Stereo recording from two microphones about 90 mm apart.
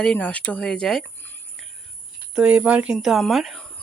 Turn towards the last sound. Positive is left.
turn(degrees=5)  # may be behind; listen again after turning